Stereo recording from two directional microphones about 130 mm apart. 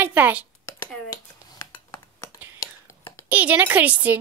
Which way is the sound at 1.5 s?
25° left (ahead or behind).